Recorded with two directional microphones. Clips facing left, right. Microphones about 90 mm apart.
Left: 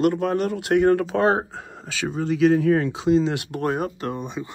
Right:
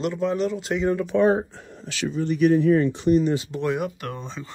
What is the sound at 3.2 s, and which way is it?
Speech, 65° left (ahead or behind).